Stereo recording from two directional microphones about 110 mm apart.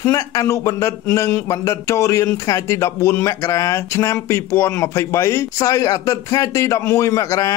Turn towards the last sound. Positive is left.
turn(degrees=30)  # may be behind; listen again after turning